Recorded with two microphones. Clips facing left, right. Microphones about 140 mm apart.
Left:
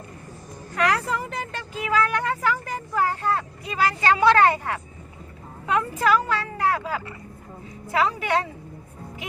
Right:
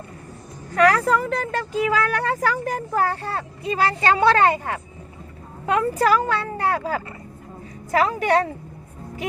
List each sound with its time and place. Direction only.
0.8 s a woman's voice: 45° right (ahead or behind)
1.8 s speech: 35° right (ahead or behind)
3.6 s a woman's voice: 30° right (ahead or behind)
5.6 s speech: 40° right (ahead or behind)
7.9 s speech: 50° right (ahead or behind)